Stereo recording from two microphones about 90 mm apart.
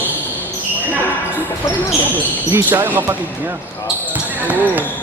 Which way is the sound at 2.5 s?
25° right (ahead or behind).